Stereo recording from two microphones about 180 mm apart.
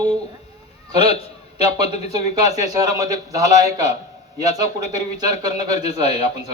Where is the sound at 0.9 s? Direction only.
35° left (ahead or behind).